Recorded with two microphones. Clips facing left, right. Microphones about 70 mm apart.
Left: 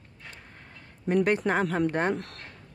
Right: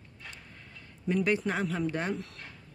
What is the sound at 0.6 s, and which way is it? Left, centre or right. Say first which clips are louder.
Speech: left 2 dB; left.